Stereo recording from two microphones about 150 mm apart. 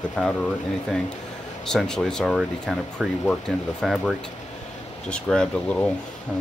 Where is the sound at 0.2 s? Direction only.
5° left (ahead or behind).